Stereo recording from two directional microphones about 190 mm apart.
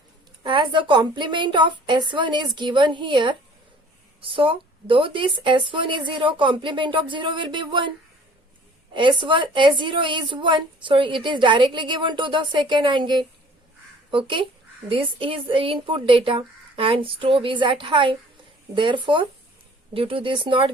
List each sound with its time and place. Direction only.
0.4 s a woman's voice: 25° right (ahead or behind)